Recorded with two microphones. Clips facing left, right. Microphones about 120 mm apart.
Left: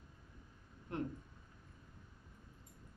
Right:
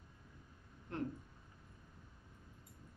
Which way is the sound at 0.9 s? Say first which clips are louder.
Left 1 dB; 15° left (ahead or behind).